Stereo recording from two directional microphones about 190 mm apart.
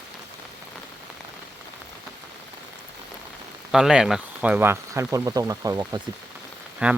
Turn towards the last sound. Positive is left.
turn(degrees=-5)  # may be behind; listen again after turning